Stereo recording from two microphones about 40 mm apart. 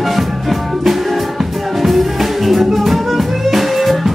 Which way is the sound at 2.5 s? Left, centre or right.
Centre.